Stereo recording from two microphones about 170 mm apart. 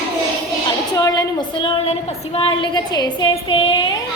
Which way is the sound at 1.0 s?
20° left (ahead or behind).